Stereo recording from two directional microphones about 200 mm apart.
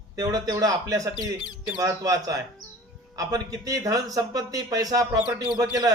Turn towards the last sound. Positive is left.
turn(degrees=-20)  # may be behind; listen again after turning